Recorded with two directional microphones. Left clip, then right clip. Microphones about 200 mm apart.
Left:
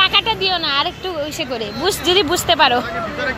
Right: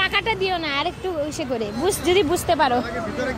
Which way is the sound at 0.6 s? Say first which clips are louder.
Left 5 dB; 25° right (ahead or behind).